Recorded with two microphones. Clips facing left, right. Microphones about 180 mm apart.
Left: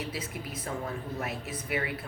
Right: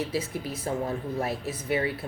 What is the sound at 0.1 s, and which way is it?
Speech, 30° right (ahead or behind).